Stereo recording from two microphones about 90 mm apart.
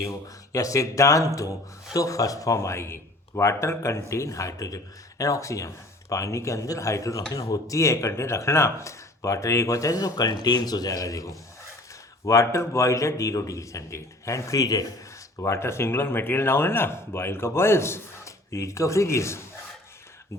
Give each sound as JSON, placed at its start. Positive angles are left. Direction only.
{"t": 0.0, "sound": "speech", "side_deg": 40}
{"t": 15.4, "sound": "speech", "side_deg": 30}